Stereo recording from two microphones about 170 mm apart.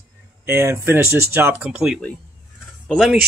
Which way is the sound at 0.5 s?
15° right (ahead or behind).